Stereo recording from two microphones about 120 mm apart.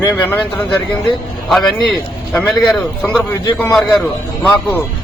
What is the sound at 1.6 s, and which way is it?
Speech, 35° left (ahead or behind).